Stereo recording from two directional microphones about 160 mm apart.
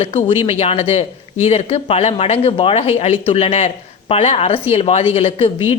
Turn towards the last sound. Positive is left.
turn(degrees=35)  # may be behind; listen again after turning